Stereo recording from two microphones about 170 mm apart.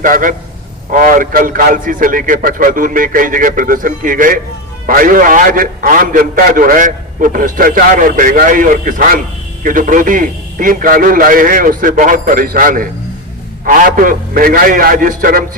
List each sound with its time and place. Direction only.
0.0 s a man's voice: 50° right (ahead or behind)